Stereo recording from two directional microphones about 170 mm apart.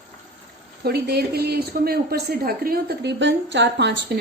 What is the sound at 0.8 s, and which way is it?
Speech, 70° right (ahead or behind).